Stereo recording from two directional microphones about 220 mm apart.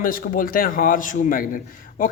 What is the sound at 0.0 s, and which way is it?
A man's voice, 40° left (ahead or behind).